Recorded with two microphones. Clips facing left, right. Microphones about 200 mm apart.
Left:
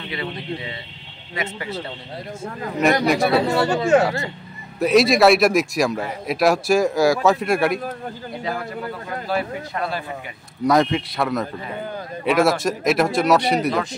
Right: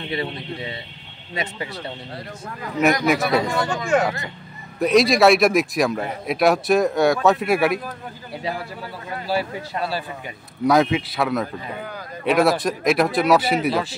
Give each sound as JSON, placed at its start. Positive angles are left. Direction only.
{"t": 1.3, "sound": "speech", "side_deg": -30}
{"t": 3.1, "sound": "a man's voice", "side_deg": 0}
{"t": 3.5, "sound": "speech", "side_deg": 25}
{"t": 4.7, "sound": "a man's voice", "side_deg": 0}
{"t": 9.3, "sound": "speech", "side_deg": -35}
{"t": 10.6, "sound": "a man's voice", "side_deg": 0}